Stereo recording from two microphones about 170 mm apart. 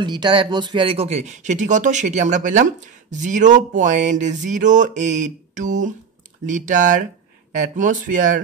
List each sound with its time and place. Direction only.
0.0 s speech: 25° right (ahead or behind); by 8.4 s 50° right (ahead or behind)